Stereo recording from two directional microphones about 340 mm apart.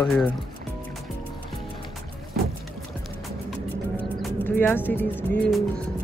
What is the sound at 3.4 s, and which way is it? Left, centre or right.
Music, centre.